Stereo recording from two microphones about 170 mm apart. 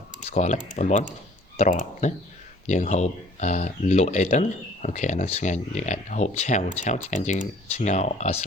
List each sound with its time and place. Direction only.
0.3 s speech: 45° left (ahead or behind)